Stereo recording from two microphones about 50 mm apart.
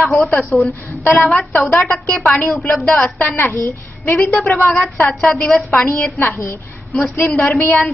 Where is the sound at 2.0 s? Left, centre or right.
Left.